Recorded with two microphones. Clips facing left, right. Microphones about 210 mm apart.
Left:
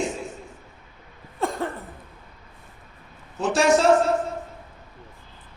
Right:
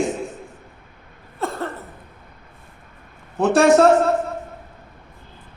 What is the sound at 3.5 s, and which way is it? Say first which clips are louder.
Speech: right 6 dB; 60° right (ahead or behind).